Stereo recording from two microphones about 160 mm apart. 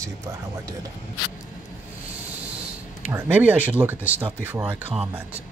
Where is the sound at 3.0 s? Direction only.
15° right (ahead or behind).